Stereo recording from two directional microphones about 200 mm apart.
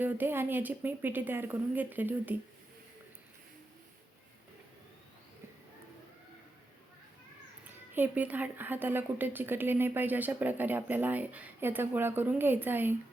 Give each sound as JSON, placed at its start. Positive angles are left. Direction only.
{"t": 0.0, "sound": "a woman's voice", "side_deg": -10}
{"t": 7.9, "sound": "a woman's voice", "side_deg": -10}